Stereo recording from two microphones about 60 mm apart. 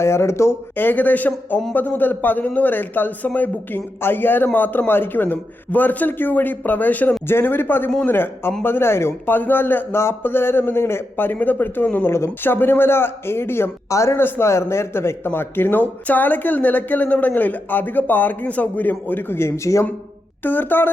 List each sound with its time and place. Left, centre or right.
0.0 s speech: left
0.8 s speech: left
12.0 s speech: left
13.9 s a man's voice: left
14.2 s speech: left
20.4 s speech: left